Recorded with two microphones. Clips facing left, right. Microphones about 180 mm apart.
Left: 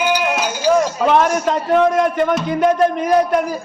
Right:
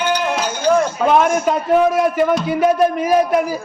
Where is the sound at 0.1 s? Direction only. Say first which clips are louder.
Left 1 dB; 5° left (ahead or behind).